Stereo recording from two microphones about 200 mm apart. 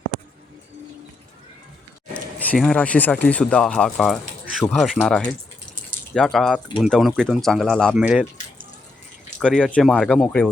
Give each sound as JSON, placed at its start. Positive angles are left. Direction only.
{"t": 2.1, "sound": "speech", "side_deg": 5}
{"t": 9.4, "sound": "speech", "side_deg": 5}